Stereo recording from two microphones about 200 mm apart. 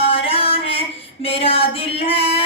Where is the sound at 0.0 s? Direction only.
30° left (ahead or behind).